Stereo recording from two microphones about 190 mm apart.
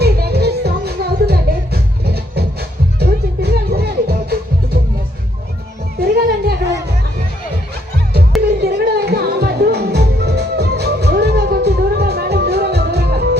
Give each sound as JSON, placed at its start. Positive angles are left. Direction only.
{"t": 0.0, "sound": "music", "side_deg": -55}
{"t": 6.0, "sound": "music", "side_deg": -55}
{"t": 8.6, "sound": "music", "side_deg": -55}